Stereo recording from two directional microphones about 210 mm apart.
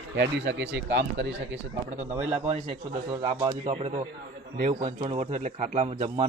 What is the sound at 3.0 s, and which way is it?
Speech, 20° right (ahead or behind).